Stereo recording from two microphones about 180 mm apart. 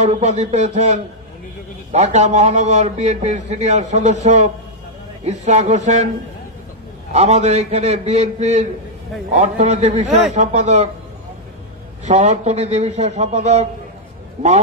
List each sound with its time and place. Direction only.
0.0 s a man's voice: 40° right (ahead or behind)
7.1 s a man's voice: 40° right (ahead or behind)
12.0 s a man's voice: 40° right (ahead or behind)